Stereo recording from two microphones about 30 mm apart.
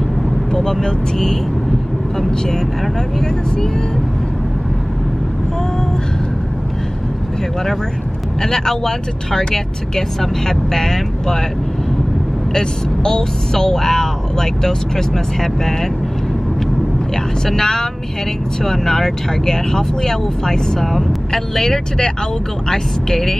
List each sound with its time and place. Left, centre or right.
0.5 s speech: centre
8.4 s speech: centre
12.5 s speech: centre
17.5 s speech: centre